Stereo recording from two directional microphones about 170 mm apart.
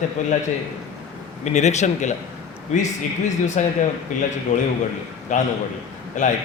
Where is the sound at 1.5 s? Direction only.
40° left (ahead or behind).